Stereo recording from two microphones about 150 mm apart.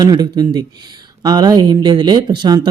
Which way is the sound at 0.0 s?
25° right (ahead or behind).